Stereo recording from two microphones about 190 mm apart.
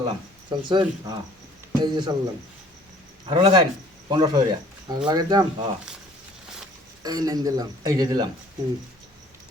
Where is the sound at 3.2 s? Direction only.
25° right (ahead or behind).